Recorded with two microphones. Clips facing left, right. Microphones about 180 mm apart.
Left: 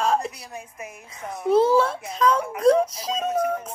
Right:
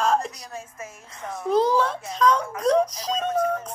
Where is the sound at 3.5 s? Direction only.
15° left (ahead or behind).